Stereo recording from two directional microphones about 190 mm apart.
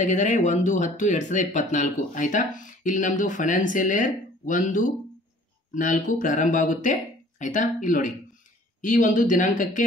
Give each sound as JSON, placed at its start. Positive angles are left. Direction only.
{"t": 0.0, "sound": "speech", "side_deg": 40}